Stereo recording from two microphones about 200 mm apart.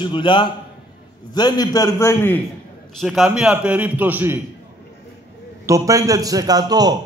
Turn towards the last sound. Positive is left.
turn(degrees=-20)  # may be behind; listen again after turning